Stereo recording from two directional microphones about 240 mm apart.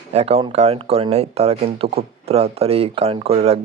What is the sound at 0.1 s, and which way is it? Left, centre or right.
Speech, right.